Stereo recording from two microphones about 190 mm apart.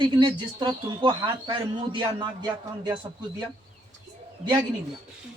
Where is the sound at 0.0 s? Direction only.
25° right (ahead or behind).